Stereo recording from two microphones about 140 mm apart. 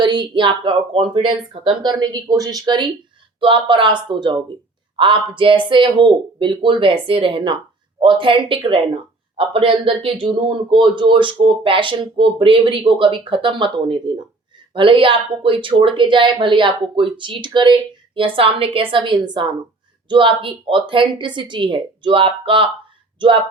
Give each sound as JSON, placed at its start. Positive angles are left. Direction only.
{"t": 0.0, "sound": "speech", "side_deg": -35}